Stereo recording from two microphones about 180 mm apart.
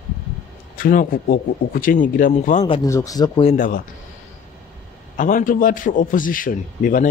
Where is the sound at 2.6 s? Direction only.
30° left (ahead or behind).